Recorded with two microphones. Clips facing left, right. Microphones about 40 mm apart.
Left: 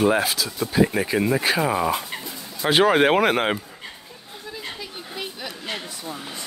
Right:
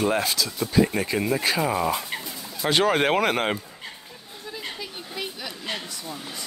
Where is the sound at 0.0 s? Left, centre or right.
Centre.